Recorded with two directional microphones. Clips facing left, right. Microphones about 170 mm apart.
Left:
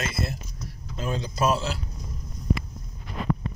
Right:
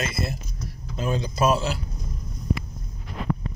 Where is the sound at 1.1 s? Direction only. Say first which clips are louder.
Right 3 dB; 10° right (ahead or behind).